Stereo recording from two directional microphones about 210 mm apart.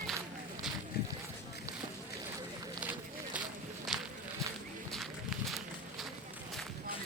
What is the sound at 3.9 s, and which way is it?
Walk, centre (ahead or behind).